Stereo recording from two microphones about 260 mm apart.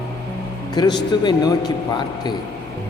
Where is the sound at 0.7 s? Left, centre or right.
Centre.